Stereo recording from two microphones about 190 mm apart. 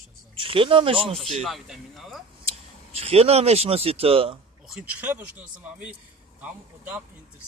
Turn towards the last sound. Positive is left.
turn(degrees=-10)  # may be behind; listen again after turning